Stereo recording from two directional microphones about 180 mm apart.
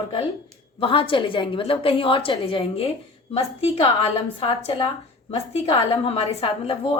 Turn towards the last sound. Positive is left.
turn(degrees=35)  # may be behind; listen again after turning